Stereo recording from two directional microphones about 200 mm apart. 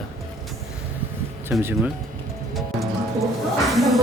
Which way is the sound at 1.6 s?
10° right (ahead or behind).